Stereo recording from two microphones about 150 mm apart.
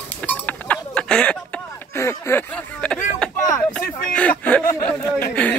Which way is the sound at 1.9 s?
15° left (ahead or behind).